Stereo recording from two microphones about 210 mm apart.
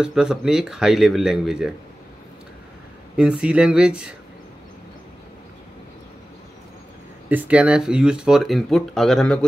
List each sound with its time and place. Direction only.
0.0 s speech: 5° right (ahead or behind)
3.2 s speech: 5° right (ahead or behind)
7.2 s speech: 5° right (ahead or behind)